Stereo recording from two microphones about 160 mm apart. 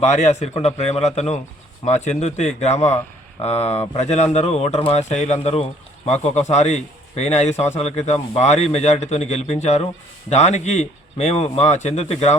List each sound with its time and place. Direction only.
0.0 s a man's voice: 45° left (ahead or behind)